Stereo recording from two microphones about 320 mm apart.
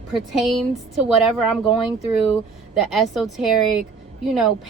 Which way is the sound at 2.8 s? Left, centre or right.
Centre.